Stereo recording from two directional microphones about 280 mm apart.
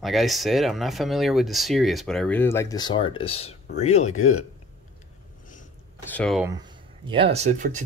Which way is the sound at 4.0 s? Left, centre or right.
Left.